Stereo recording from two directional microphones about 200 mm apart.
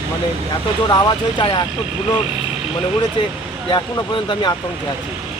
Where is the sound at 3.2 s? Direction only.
25° left (ahead or behind).